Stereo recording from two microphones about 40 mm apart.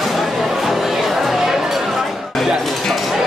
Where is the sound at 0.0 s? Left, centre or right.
Centre.